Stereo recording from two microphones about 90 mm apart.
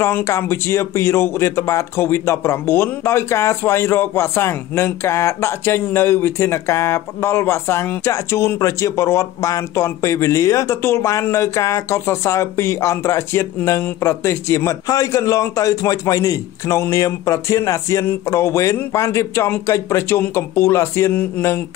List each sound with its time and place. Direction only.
0.0 s a man's voice: 30° left (ahead or behind)